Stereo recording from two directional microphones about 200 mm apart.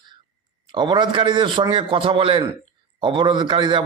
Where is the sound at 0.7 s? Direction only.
25° right (ahead or behind).